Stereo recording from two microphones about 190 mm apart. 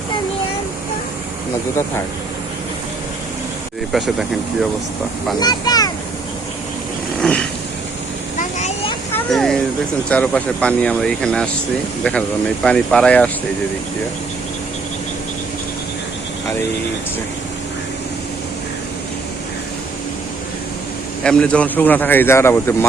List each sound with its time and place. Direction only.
3.9 s speech: centre (ahead or behind)
5.4 s a child's voice: 20° left (ahead or behind)
7.2 s a sound: 5° left (ahead or behind)
8.4 s vehicle: 40° left (ahead or behind)
9.1 s a sound: 5° left (ahead or behind)
10.1 s speech: 5° left (ahead or behind)
12.6 s speech: 5° left (ahead or behind)
21.2 s speech: 5° left (ahead or behind)